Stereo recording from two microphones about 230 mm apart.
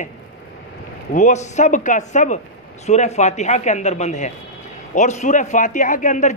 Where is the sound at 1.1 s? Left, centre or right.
Left.